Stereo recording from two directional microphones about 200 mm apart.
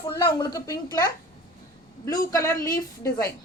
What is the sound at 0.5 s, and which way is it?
Speech, 15° left (ahead or behind).